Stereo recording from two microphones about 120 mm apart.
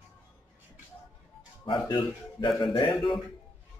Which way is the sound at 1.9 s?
40° left (ahead or behind).